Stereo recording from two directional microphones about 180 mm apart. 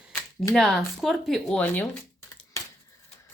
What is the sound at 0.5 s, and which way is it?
Speech, centre (ahead or behind).